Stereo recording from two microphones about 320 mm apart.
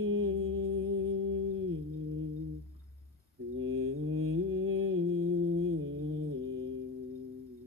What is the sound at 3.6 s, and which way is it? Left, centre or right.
Mantra, right.